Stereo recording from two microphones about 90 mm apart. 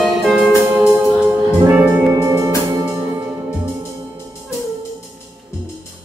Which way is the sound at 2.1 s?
35° right (ahead or behind).